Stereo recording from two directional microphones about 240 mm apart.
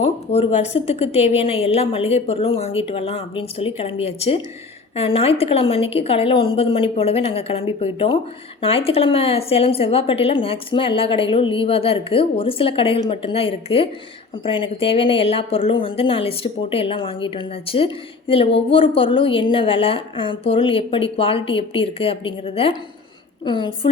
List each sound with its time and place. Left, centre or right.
0.0 s speech: left